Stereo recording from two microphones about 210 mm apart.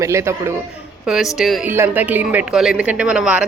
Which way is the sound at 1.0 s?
Centre (ahead or behind).